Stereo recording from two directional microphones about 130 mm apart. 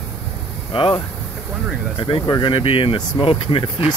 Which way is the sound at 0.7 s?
45° left (ahead or behind).